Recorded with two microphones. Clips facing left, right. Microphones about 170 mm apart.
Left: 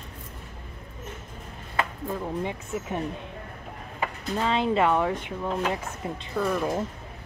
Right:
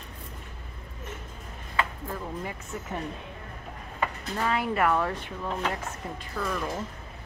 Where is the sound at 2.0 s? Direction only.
20° left (ahead or behind).